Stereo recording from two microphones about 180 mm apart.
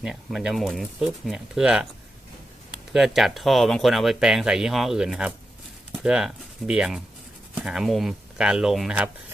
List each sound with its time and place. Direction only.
0.0 s speech: 5° right (ahead or behind)